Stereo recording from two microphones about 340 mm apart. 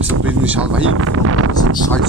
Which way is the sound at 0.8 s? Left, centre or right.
Right.